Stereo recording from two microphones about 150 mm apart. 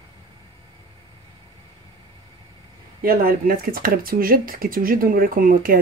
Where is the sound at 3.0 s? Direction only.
75° right (ahead or behind).